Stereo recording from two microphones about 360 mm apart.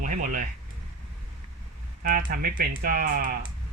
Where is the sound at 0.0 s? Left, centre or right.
Right.